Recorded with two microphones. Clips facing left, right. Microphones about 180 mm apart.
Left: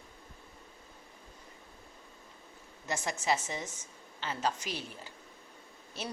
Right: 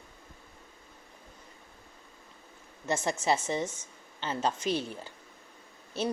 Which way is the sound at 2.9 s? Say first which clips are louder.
Right 4 dB; 30° right (ahead or behind).